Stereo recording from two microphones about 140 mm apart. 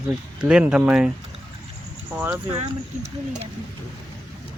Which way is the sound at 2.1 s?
15° right (ahead or behind).